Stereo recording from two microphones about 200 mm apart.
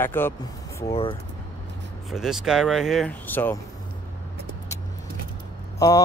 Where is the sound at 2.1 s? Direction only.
Centre (ahead or behind).